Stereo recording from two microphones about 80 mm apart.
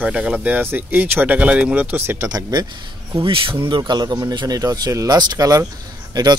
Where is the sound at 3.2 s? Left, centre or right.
Right.